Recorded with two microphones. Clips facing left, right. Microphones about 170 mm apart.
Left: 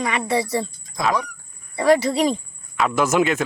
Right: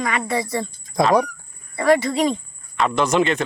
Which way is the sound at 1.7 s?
30° left (ahead or behind).